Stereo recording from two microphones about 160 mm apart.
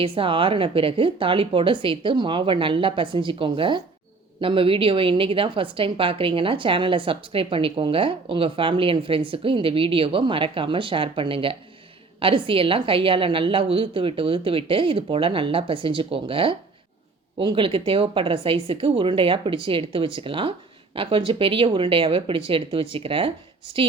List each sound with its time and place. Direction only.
0.0 s a woman's voice: 35° right (ahead or behind)